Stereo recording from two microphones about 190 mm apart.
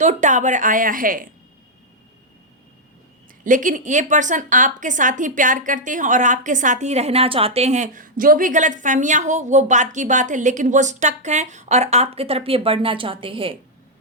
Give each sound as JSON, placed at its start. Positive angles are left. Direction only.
{"t": 0.0, "sound": "a woman's voice", "side_deg": -40}
{"t": 3.4, "sound": "a woman's voice", "side_deg": -45}